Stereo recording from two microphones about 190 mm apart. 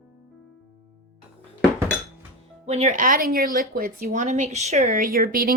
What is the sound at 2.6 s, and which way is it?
A woman's voice, 35° right (ahead or behind).